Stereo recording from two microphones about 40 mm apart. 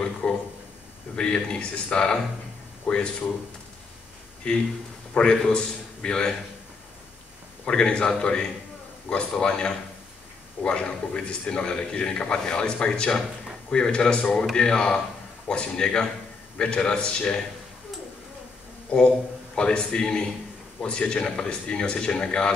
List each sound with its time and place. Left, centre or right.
0.2 s a sound: left
1.1 s a man's voice: left
5.2 s a man's voice: centre
7.6 s a man's voice: left
18.9 s a man's voice: left